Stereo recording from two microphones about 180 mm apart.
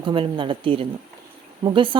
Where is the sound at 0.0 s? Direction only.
25° right (ahead or behind).